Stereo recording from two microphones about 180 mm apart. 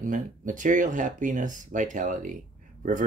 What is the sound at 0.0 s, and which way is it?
Speech, 45° right (ahead or behind).